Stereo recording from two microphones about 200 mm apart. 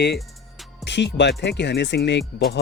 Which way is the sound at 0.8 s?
60° left (ahead or behind).